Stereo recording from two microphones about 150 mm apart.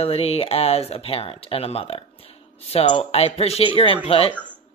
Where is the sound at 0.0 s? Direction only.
40° left (ahead or behind).